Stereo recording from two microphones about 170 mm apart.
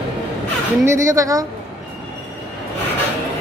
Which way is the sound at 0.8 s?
15° right (ahead or behind).